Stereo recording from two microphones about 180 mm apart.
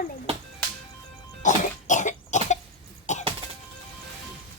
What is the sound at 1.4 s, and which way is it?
Cough, 45° left (ahead or behind).